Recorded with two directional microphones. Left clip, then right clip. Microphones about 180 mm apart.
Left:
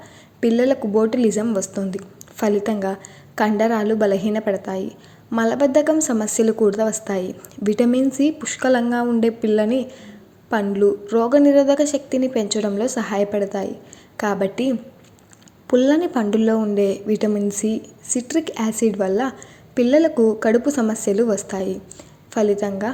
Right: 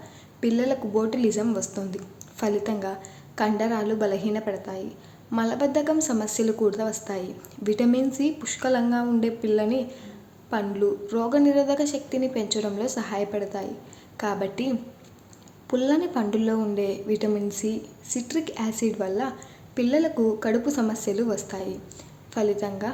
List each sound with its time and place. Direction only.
0.3 s a woman's voice: 30° left (ahead or behind)